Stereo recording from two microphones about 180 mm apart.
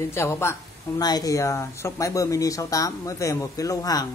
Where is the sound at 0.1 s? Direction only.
15° left (ahead or behind).